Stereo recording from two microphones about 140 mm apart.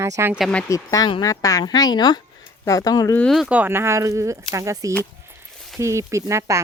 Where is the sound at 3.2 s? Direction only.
Centre (ahead or behind).